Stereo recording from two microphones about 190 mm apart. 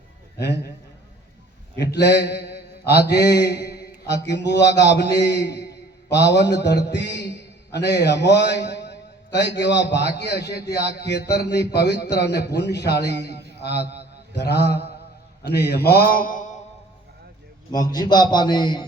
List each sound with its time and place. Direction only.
0.3 s a man's voice: 60° left (ahead or behind)
1.7 s mantra: 60° left (ahead or behind)
6.1 s a man's voice: 65° left (ahead or behind); by 16.6 s 45° left (ahead or behind)
17.7 s a man's voice: 20° left (ahead or behind)